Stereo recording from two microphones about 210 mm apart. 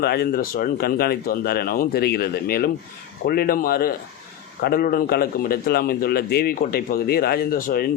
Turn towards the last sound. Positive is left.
turn(degrees=45)  # may be behind; listen again after turning